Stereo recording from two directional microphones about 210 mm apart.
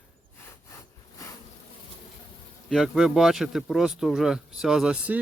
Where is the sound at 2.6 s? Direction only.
Centre (ahead or behind).